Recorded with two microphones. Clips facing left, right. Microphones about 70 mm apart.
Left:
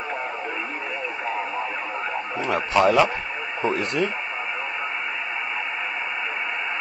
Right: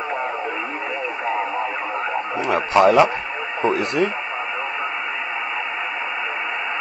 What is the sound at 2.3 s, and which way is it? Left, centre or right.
Speech, centre.